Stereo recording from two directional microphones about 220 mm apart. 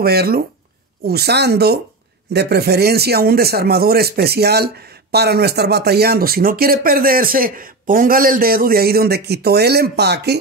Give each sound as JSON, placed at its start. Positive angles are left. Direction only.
{"t": 0.0, "sound": "a man's voice", "side_deg": -45}